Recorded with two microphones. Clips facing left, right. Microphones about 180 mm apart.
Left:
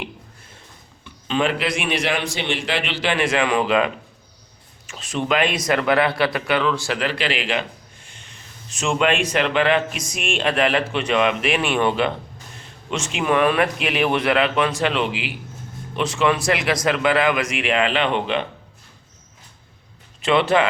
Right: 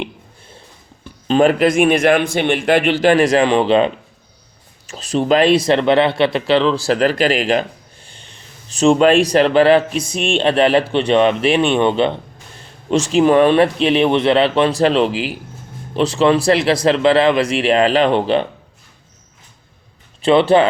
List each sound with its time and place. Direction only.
1.0 s a man's voice: 40° right (ahead or behind); by 12.1 s 25° right (ahead or behind)
12.9 s a man's voice: 35° right (ahead or behind)
20.2 s a man's voice: 30° right (ahead or behind)